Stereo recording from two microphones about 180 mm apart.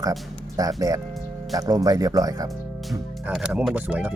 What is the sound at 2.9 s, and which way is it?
Speech, centre (ahead or behind).